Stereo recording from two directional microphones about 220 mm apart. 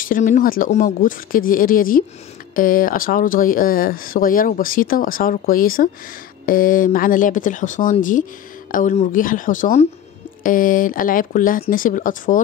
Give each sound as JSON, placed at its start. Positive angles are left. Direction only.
{"t": 0.0, "sound": "speech", "side_deg": 35}